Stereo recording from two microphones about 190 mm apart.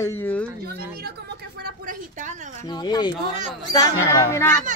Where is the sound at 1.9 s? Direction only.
40° right (ahead or behind).